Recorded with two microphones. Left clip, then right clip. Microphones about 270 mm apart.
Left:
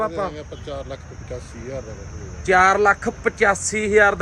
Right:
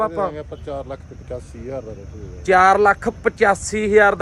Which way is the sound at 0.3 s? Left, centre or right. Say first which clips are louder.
Right 3 dB; right.